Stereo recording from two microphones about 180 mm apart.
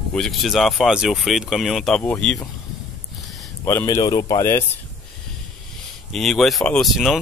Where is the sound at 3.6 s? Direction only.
15° left (ahead or behind).